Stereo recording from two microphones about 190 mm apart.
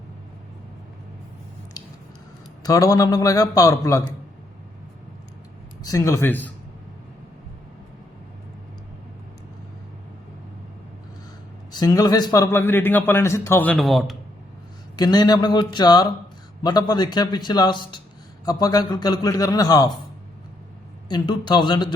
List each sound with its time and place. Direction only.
2.6 s a man's voice: 20° left (ahead or behind)
5.8 s a man's voice: 20° left (ahead or behind)
11.7 s a man's voice: 20° left (ahead or behind); by 14.2 s centre (ahead or behind)
14.9 s a man's voice: 20° left (ahead or behind)
21.1 s a man's voice: 25° left (ahead or behind)